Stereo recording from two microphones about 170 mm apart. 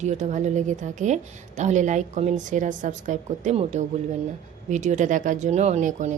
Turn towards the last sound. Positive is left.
turn(degrees=-45)  # may be behind; listen again after turning